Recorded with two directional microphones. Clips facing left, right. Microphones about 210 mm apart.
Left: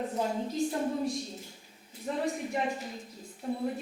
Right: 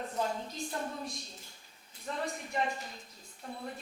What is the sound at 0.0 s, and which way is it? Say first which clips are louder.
A woman's voice: left 4 dB; 5° left (ahead or behind).